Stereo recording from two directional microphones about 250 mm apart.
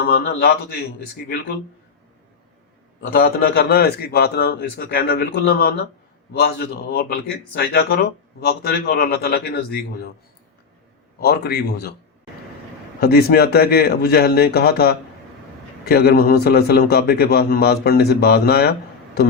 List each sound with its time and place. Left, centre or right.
0.0 s speech: left
3.1 s speech: left
11.2 s speech: left
13.0 s speech: left